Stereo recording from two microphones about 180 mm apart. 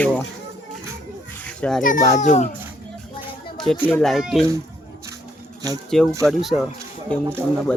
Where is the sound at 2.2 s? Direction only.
40° left (ahead or behind).